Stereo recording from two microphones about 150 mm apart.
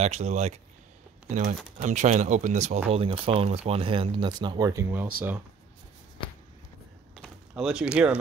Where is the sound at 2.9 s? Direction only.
40° right (ahead or behind); by 5.0 s 15° right (ahead or behind).